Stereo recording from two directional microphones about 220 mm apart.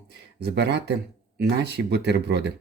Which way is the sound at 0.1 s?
50° right (ahead or behind).